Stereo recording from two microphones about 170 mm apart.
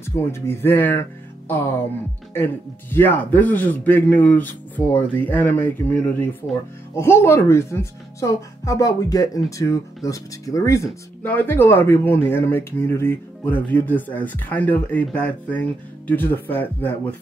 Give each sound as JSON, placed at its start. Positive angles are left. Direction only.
{"t": 0.0, "sound": "speech", "side_deg": 15}
{"t": 2.3, "sound": "speech", "side_deg": 10}